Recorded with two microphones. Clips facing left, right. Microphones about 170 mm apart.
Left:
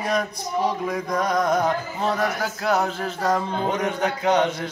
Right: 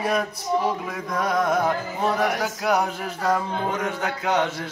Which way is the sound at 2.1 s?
10° right (ahead or behind).